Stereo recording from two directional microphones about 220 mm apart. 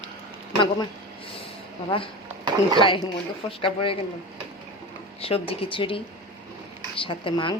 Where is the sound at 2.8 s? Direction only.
20° left (ahead or behind).